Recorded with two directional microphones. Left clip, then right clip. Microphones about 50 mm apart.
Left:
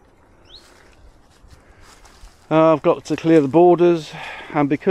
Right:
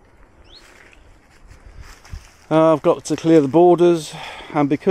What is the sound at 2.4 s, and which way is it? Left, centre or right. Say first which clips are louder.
Speech: even; right.